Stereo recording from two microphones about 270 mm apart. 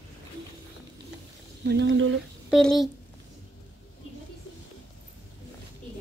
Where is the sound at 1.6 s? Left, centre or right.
Right.